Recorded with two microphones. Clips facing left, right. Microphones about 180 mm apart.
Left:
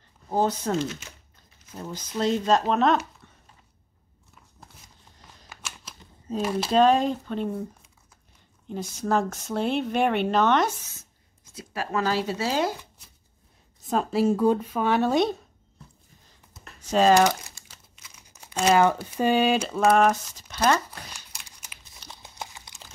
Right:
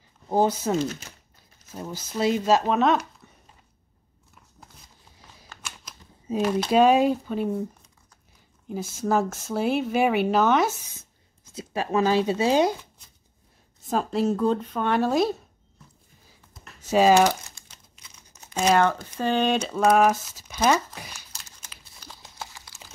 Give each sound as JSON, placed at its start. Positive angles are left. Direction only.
{"t": 0.3, "sound": "speech", "side_deg": -10}
{"t": 5.5, "sound": "a sound", "side_deg": 5}
{"t": 6.3, "sound": "speech", "side_deg": -10}
{"t": 8.6, "sound": "speech", "side_deg": -5}
{"t": 11.5, "sound": "speech", "side_deg": -20}
{"t": 13.8, "sound": "speech", "side_deg": 0}
{"t": 16.9, "sound": "speech", "side_deg": -10}
{"t": 18.7, "sound": "speech", "side_deg": 10}
{"t": 21.3, "sound": "crumpling", "side_deg": 15}